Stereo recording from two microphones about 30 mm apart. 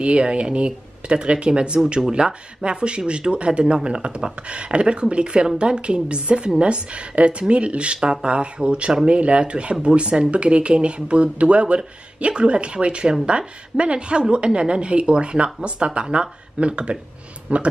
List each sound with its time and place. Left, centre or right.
0.0 s speech: right
17.5 s speech: right